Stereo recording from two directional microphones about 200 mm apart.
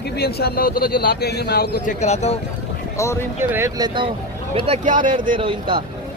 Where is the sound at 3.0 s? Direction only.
15° left (ahead or behind).